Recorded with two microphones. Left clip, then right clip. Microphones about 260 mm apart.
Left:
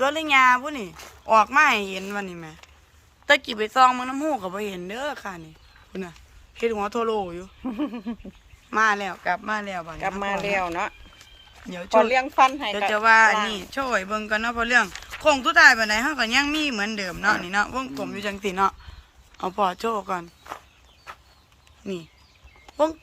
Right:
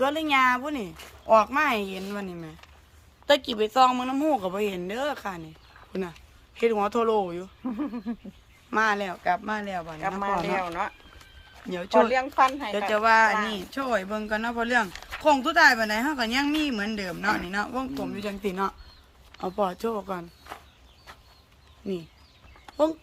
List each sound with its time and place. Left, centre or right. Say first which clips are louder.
0.0 s speech: left 4 dB; centre
7.6 s speech: left 5 dB; left
8.7 s speech: left 3 dB; centre
10.0 s speech: left 1 dB; left
11.6 s speech: right 2 dB; centre
12.1 s speech: left 3 dB; left
12.9 s speech: left 3 dB; centre
20.5 s speech: left 4 dB; centre